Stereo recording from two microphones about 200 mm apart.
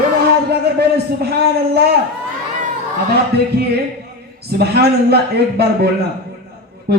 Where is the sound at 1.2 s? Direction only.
55° right (ahead or behind).